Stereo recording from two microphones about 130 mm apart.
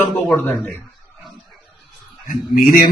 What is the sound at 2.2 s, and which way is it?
Speech, 90° left.